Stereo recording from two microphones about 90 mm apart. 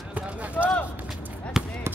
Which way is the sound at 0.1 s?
15° right (ahead or behind).